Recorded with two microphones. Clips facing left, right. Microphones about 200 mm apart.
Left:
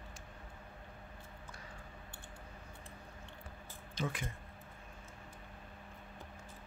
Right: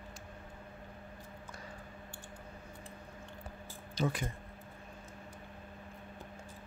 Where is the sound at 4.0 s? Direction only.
35° right (ahead or behind).